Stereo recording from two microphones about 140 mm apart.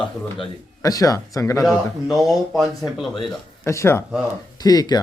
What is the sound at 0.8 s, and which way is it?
Speech, 25° left (ahead or behind).